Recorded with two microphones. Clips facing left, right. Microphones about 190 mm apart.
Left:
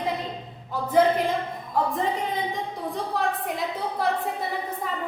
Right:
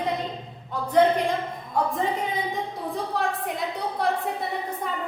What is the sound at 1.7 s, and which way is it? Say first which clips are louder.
A woman's voice: even; centre (ahead or behind).